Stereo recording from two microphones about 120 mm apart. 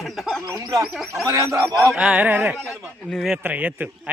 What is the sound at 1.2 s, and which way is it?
Speech, 25° right (ahead or behind).